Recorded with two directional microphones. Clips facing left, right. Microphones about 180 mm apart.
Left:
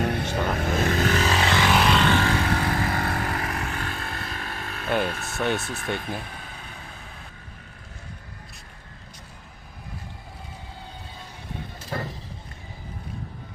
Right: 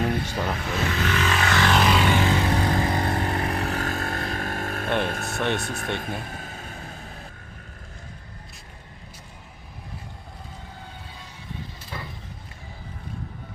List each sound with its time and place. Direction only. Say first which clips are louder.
0.0 s speech: even; 55° left (ahead or behind); by 1.6 s 25° left (ahead or behind)
1.6 s music: right 1 dB; centre (ahead or behind)
2.0 s vehicle: right 1 dB; 15° right (ahead or behind); by 4.9 s 50° right (ahead or behind)
4.9 s speech: left 1 dB; 5° left (ahead or behind)
5.1 s speech: right 4 dB; 55° right (ahead or behind)
5.4 s speech: left 1 dB; 5° left (ahead or behind)
5.6 s speech: right 2 dB; 55° right (ahead or behind)
6.2 s vehicle: right 3 dB; 45° right (ahead or behind)
11.9 s a sound: left 8 dB; 45° left (ahead or behind)